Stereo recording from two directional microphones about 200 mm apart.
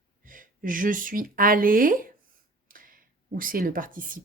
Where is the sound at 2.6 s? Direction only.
45° right (ahead or behind).